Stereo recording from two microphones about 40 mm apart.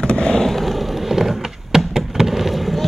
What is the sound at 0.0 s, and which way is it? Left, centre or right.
Skateboard, left.